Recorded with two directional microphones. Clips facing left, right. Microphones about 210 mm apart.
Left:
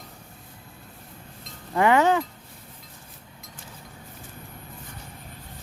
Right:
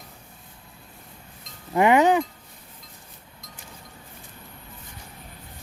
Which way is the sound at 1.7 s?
15° right (ahead or behind).